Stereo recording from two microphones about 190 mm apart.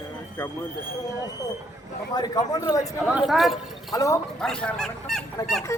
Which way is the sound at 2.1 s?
20° left (ahead or behind).